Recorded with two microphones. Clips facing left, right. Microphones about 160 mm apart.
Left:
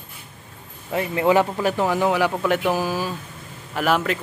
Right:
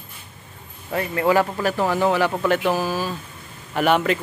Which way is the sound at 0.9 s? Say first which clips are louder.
Left 1 dB; 15° left (ahead or behind).